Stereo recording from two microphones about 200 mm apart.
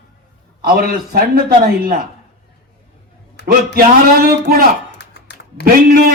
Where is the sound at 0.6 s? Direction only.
45° right (ahead or behind).